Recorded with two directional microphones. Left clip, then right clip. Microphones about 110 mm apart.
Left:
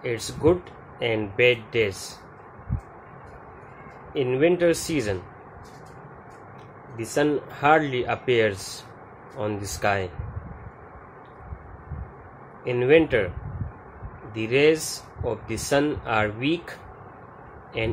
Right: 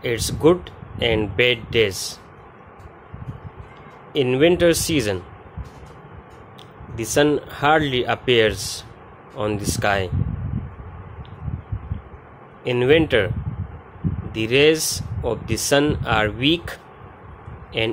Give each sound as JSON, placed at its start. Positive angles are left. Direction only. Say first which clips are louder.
{"t": 0.0, "sound": "speech", "louder": "right 5 dB", "side_deg": -55}
{"t": 4.1, "sound": "speech", "louder": "right 4 dB", "side_deg": -65}
{"t": 7.0, "sound": "a man's voice", "louder": "right 5 dB", "side_deg": -60}
{"t": 12.6, "sound": "speech", "louder": "right 2 dB", "side_deg": -60}
{"t": 14.3, "sound": "speech", "louder": "right 4 dB", "side_deg": -55}